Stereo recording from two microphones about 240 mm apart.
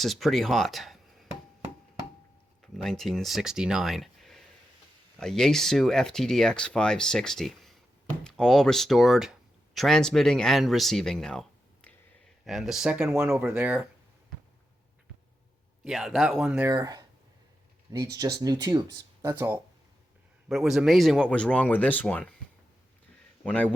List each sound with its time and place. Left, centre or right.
0.0 s speech: centre
2.7 s speech: centre
15.8 s speech: centre
16.7 s speech: centre
23.4 s speech: centre